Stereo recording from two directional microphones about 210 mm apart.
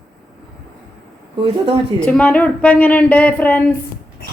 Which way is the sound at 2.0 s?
5° left (ahead or behind).